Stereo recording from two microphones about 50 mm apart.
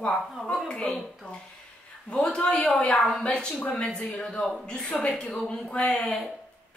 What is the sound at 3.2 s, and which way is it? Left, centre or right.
Speech, centre.